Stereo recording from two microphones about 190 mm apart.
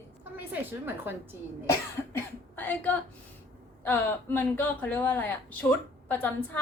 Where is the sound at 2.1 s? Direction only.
10° left (ahead or behind).